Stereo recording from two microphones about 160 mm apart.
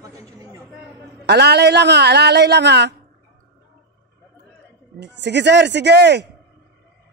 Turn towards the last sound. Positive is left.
turn(degrees=-90)